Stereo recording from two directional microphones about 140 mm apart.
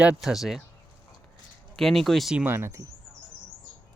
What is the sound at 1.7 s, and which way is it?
Speech, centre (ahead or behind).